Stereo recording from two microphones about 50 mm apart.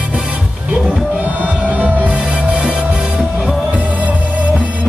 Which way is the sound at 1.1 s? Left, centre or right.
Right.